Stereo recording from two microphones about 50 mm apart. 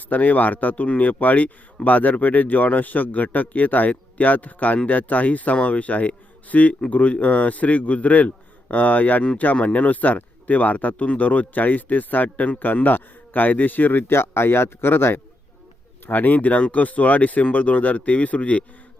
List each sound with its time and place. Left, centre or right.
0.1 s speech: left
14.1 s speech: left
16.0 s speech: left